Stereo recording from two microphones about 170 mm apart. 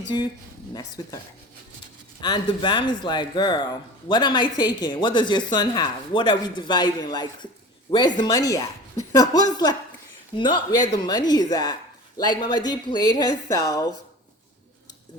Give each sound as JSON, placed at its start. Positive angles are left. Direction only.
{"t": 0.7, "sound": "speech", "side_deg": 20}
{"t": 2.2, "sound": "speech", "side_deg": 25}